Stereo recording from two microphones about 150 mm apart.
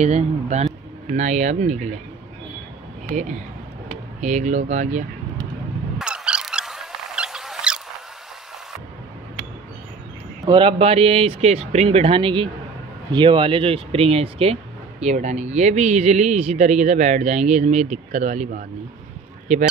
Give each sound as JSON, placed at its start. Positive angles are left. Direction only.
{"t": 0.0, "sound": "speech", "side_deg": -50}
{"t": 3.2, "sound": "speech", "side_deg": -50}
{"t": 5.9, "sound": "a sound", "side_deg": -5}
{"t": 10.4, "sound": "speech", "side_deg": -35}